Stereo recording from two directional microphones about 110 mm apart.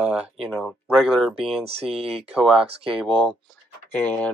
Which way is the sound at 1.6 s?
65° right (ahead or behind).